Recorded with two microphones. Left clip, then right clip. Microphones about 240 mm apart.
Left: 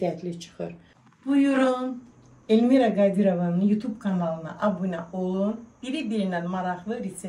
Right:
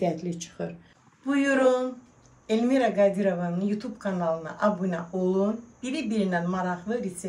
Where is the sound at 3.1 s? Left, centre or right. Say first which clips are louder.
Left 2 dB; left.